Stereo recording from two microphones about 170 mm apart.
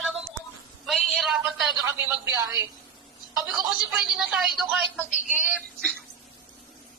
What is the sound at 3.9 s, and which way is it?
A woman's voice, centre (ahead or behind).